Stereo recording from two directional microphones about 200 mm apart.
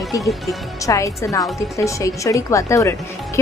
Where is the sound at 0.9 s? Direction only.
15° left (ahead or behind).